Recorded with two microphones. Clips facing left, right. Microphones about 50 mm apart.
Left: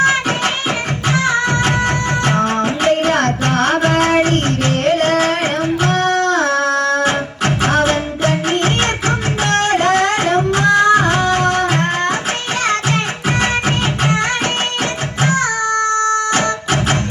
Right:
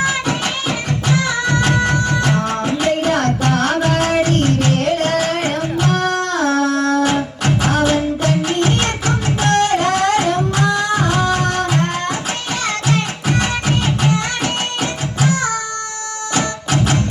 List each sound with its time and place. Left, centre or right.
0.0 s music: left
15.2 s music: left